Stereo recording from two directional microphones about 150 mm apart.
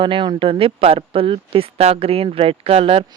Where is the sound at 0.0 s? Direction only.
35° right (ahead or behind).